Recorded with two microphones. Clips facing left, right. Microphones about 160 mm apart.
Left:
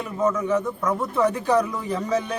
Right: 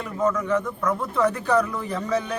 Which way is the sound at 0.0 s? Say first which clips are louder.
Left 1 dB; 10° left (ahead or behind).